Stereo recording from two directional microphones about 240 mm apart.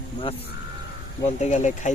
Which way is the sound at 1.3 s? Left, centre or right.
Left.